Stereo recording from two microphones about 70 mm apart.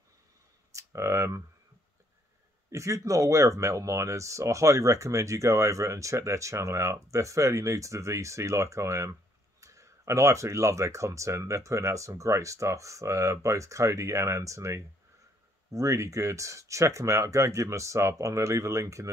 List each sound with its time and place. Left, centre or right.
0.7 s clicking: right
2.7 s speech: right